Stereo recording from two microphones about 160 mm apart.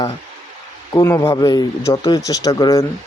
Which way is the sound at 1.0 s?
15° left (ahead or behind).